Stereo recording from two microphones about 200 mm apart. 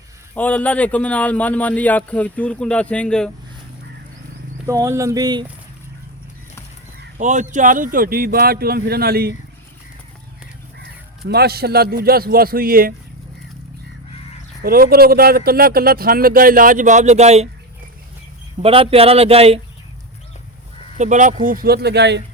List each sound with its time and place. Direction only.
0.3 s a man's voice: 5° left (ahead or behind)
4.6 s speech: 15° right (ahead or behind)
7.2 s speech: 35° right (ahead or behind)
11.3 s speech: 50° right (ahead or behind)
14.6 s speech: 45° right (ahead or behind)
18.6 s speech: 30° right (ahead or behind)
21.0 s speech: 35° right (ahead or behind); by 22.2 s 60° right (ahead or behind)